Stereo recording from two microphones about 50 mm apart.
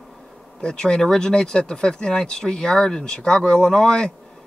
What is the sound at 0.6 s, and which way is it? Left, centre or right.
Speech, centre.